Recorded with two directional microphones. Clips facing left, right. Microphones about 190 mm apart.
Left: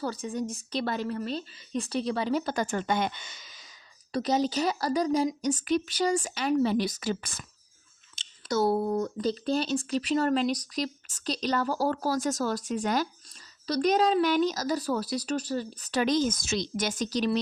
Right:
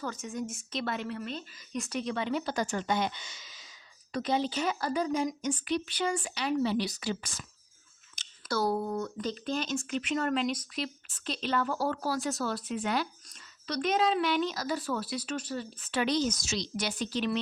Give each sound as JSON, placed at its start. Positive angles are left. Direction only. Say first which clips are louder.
{"t": 0.0, "sound": "speech", "louder": "left 4 dB", "side_deg": 35}
{"t": 4.1, "sound": "speech", "louder": "left 4 dB", "side_deg": 40}
{"t": 8.1, "sound": "speech", "louder": "left 4 dB", "side_deg": 25}